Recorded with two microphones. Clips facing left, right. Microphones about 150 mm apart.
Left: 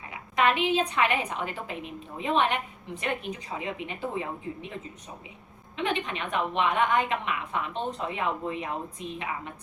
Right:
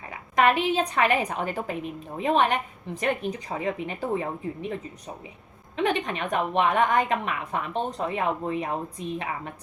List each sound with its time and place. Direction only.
0.1 s a woman's voice: 40° right (ahead or behind)
5.7 s a woman's voice: 40° right (ahead or behind)